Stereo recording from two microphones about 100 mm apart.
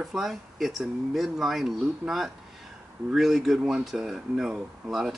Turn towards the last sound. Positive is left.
turn(degrees=-5)  # may be behind; listen again after turning